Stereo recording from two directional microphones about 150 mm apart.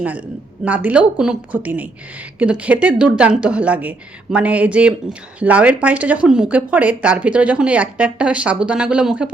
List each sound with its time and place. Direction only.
0.0 s a woman's voice: 10° right (ahead or behind)